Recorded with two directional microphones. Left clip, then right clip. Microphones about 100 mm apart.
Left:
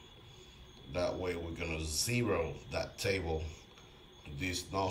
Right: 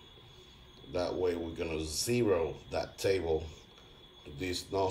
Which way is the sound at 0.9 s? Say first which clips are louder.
Right 3 dB; 30° right (ahead or behind).